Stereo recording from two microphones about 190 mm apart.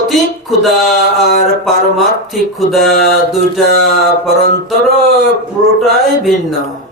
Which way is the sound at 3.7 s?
55° right (ahead or behind).